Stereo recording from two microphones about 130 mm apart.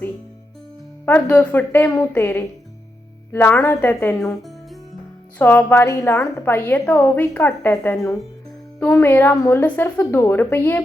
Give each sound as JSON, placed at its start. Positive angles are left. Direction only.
{"t": 1.0, "sound": "a woman's voice", "side_deg": 15}
{"t": 5.4, "sound": "a woman's voice", "side_deg": 15}
{"t": 7.9, "sound": "speech", "side_deg": 5}
{"t": 8.9, "sound": "a woman's voice", "side_deg": 20}